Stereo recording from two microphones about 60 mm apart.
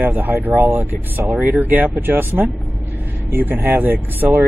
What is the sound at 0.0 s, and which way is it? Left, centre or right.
Speech, right.